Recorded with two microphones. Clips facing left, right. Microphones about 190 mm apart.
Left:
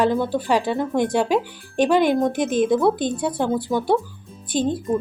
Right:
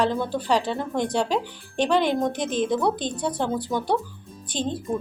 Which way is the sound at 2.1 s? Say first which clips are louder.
Left 5 dB; 50° left (ahead or behind).